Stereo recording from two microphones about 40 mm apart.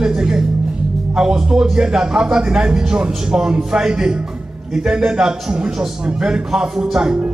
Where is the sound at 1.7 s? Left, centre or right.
Centre.